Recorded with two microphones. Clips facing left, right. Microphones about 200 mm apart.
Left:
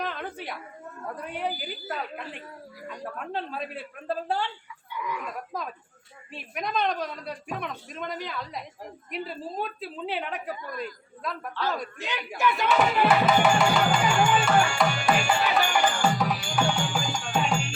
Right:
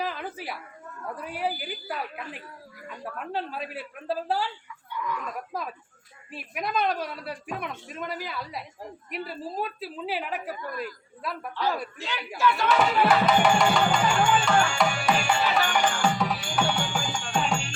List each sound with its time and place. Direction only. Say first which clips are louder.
0.0 s a sound: right 1 dB; 5° right (ahead or behind)
1.1 s speech: right 1 dB; 5° right (ahead or behind)
4.9 s speech: right 1 dB; 10° left (ahead or behind)
6.3 s speech: right 1 dB; 5° right (ahead or behind)
11.5 s a man's voice: right 2 dB; 15° right (ahead or behind)
11.9 s a man's voice: even; 20° left (ahead or behind)
13.0 s music: even; 5° left (ahead or behind)